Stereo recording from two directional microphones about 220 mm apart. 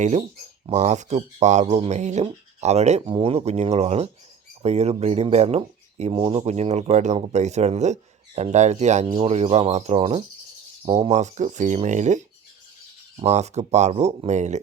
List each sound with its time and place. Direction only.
0.0 s speech: 30° right (ahead or behind)